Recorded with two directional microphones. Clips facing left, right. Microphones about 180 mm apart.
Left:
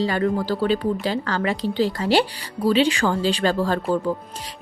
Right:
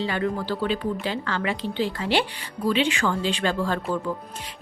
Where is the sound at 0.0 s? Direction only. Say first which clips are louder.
Left 5 dB; 40° left (ahead or behind).